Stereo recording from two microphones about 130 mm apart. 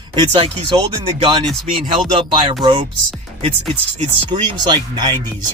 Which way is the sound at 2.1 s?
40° right (ahead or behind).